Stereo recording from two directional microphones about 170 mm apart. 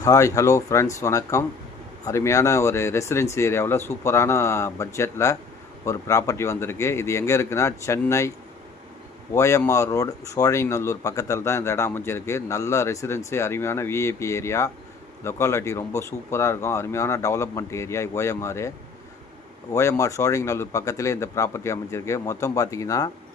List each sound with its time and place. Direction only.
0.0 s speech: 20° left (ahead or behind)
9.3 s speech: 15° left (ahead or behind)
19.7 s speech: 20° left (ahead or behind)